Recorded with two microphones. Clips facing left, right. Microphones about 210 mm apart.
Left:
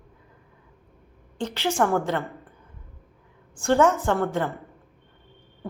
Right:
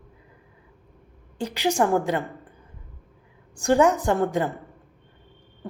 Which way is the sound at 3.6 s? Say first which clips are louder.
Right 1 dB; 15° right (ahead or behind).